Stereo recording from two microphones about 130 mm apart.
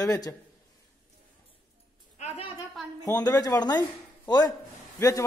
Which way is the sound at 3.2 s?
25° left (ahead or behind).